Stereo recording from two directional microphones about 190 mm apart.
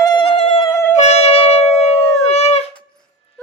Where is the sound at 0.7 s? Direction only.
15° left (ahead or behind).